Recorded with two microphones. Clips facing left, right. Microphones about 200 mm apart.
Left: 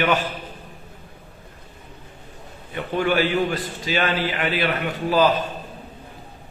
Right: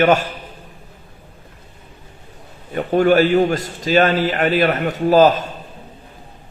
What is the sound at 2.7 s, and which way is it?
A man's voice, 45° right (ahead or behind).